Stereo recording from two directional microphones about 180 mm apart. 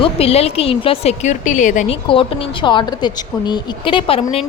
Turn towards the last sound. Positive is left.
turn(degrees=30)  # may be behind; listen again after turning